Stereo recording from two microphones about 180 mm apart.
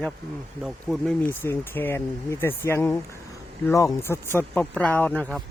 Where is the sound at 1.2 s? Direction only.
10° left (ahead or behind).